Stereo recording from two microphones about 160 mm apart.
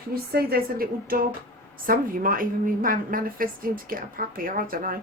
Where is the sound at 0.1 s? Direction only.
70° right (ahead or behind).